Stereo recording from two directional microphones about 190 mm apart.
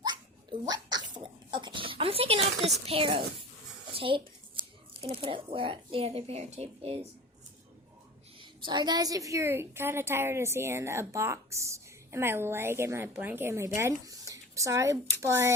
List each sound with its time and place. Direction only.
0.0 s a sound: 20° right (ahead or behind)
2.8 s speech: 30° right (ahead or behind)
8.4 s a woman's voice: 25° right (ahead or behind)